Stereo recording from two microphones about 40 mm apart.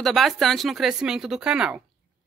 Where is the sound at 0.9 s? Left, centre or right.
Centre.